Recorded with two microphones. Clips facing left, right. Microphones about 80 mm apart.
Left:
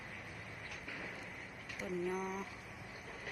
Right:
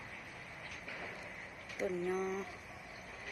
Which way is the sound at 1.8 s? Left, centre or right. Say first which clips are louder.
Right 3 dB; centre.